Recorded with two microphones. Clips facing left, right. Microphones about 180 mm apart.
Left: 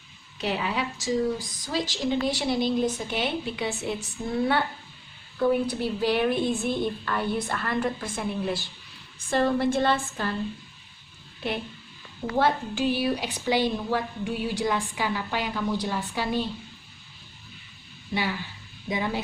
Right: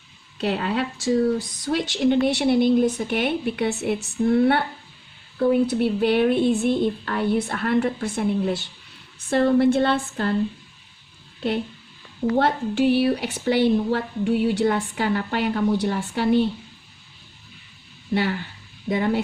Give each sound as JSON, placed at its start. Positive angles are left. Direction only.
{"t": 0.3, "sound": "a woman's voice", "side_deg": -60}
{"t": 12.4, "sound": "speech", "side_deg": -65}
{"t": 18.1, "sound": "speech", "side_deg": -60}